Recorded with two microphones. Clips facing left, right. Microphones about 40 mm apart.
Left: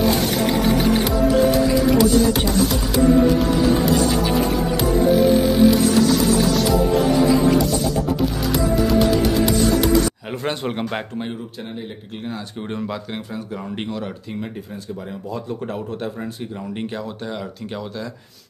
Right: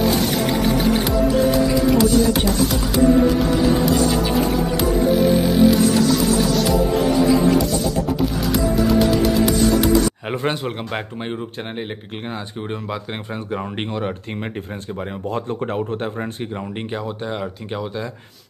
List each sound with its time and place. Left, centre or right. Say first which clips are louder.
0.2 s music: even; centre
7.2 s a sound: even; centre
8.5 s music: right 1 dB; centre
10.3 s speech: right 3 dB; centre
10.6 s speech: left 1 dB; centre
12.7 s speech: left 1 dB; centre
13.8 s speech: right 4 dB; right
15.2 s a man's voice: right 4 dB; right
15.7 s a man's voice: right 3 dB; right
16.9 s speech: right 2 dB; centre